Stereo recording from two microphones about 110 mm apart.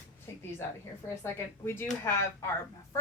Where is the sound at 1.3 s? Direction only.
25° left (ahead or behind).